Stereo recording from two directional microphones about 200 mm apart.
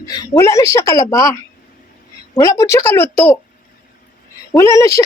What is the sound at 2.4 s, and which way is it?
Speech, 15° left (ahead or behind).